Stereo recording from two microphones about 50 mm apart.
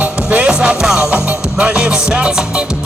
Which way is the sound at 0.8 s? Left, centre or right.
Centre.